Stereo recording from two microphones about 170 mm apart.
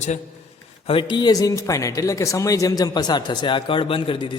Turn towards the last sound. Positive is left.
turn(degrees=30)  # may be behind; listen again after turning